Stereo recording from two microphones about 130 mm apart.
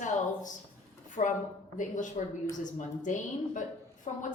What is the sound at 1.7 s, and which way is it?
A woman's voice, 75° left (ahead or behind).